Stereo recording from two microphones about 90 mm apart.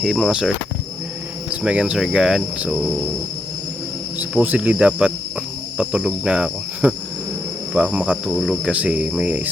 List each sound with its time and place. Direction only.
0.0 s speech: 5° right (ahead or behind)
1.5 s cricket: 10° right (ahead or behind)
4.2 s cricket: 15° right (ahead or behind)
8.3 s speech: centre (ahead or behind)
8.6 s cricket: 15° right (ahead or behind)